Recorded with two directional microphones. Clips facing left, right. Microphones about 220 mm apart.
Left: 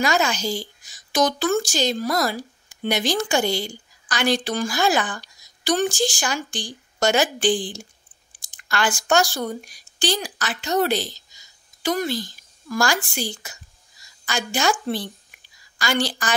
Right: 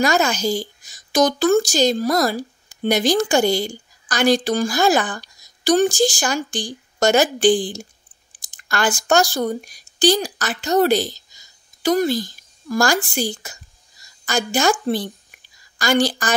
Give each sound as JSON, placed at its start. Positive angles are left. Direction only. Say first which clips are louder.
{"t": 0.0, "sound": "a woman's voice", "louder": "right 4 dB", "side_deg": -45}